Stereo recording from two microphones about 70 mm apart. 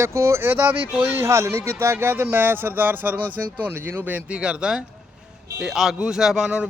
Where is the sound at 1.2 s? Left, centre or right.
Right.